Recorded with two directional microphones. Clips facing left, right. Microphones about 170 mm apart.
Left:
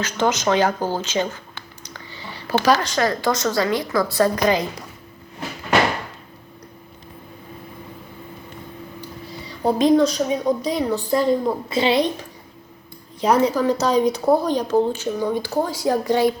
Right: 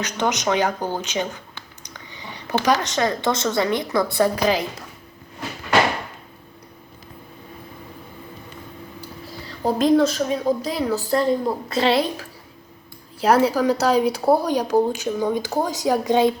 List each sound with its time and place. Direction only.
0.0 s speech: 15° right (ahead or behind)
4.2 s a woman's voice: 5° right (ahead or behind)
9.0 s a woman's voice: centre (ahead or behind)
13.2 s a woman's voice: 5° right (ahead or behind)